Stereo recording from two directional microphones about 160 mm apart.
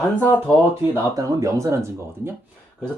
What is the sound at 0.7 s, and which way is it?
Speech, 20° right (ahead or behind).